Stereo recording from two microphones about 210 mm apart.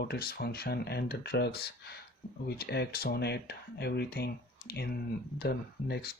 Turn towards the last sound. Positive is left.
turn(degrees=50)  # may be behind; listen again after turning